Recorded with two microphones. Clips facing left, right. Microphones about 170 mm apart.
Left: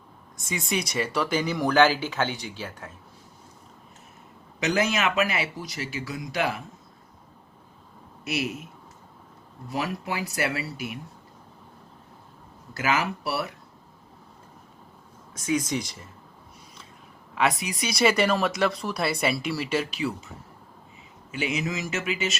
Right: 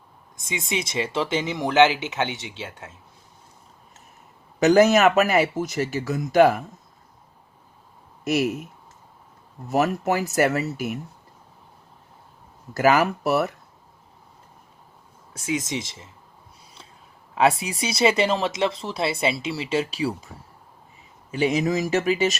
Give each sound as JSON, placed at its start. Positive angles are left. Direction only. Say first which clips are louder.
{"t": 0.4, "sound": "speech", "louder": "right 1 dB", "side_deg": -25}
{"t": 4.6, "sound": "speech", "louder": "right 9 dB", "side_deg": -40}
{"t": 8.2, "sound": "speech", "louder": "right 7 dB", "side_deg": -40}
{"t": 9.6, "sound": "speech", "louder": "right 8 dB", "side_deg": -45}
{"t": 12.7, "sound": "speech", "louder": "right 7 dB", "side_deg": -45}
{"t": 15.3, "sound": "speech", "louder": "left 1 dB", "side_deg": -25}
{"t": 17.3, "sound": "speech", "louder": "right 5 dB", "side_deg": -30}
{"t": 21.3, "sound": "speech", "louder": "right 7 dB", "side_deg": -35}